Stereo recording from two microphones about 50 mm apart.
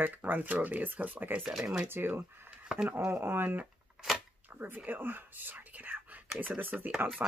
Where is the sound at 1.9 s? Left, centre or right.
Right.